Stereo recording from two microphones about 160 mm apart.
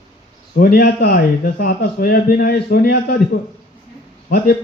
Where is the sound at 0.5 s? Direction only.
70° left (ahead or behind).